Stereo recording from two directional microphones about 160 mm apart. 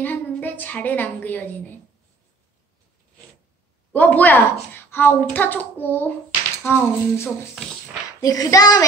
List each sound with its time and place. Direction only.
0.0 s a woman's voice: 10° left (ahead or behind)
3.9 s speech: 10° left (ahead or behind)
7.6 s speech: centre (ahead or behind)
8.2 s child singing: 20° left (ahead or behind)